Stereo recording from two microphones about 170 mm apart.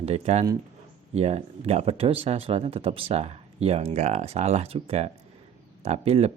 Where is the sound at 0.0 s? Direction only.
40° right (ahead or behind).